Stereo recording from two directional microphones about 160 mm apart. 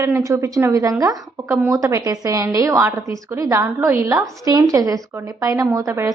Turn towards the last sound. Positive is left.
turn(degrees=-20)  # may be behind; listen again after turning